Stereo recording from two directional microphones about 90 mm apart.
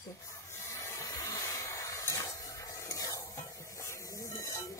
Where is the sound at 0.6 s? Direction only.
30° left (ahead or behind).